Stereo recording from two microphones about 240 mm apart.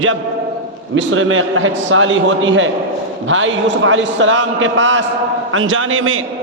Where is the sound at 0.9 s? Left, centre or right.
Right.